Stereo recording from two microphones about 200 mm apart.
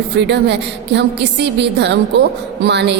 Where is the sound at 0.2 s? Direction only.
60° right (ahead or behind).